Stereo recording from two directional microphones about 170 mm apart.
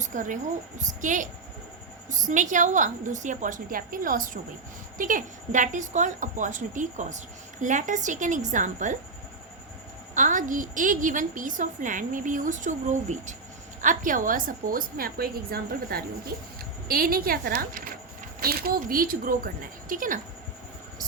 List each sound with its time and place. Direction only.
0.0 s a woman's voice: 50° right (ahead or behind)
10.2 s a woman's voice: 50° right (ahead or behind)